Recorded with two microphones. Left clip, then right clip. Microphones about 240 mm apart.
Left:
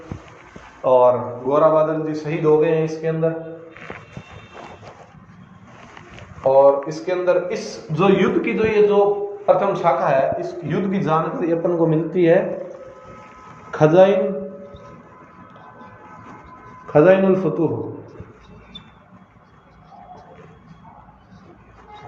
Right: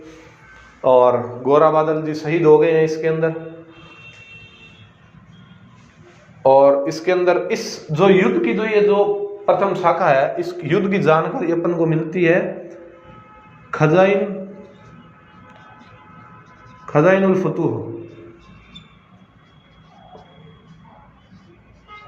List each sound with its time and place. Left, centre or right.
0.9 s speech: right
6.4 s speech: right
13.7 s speech: right
16.8 s speech: right